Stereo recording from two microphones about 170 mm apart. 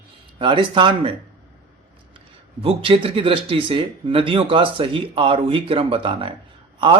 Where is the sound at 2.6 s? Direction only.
35° right (ahead or behind).